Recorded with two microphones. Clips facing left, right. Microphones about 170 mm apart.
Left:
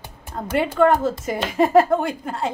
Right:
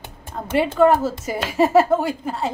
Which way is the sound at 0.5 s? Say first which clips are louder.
Right 1 dB; 5° right (ahead or behind).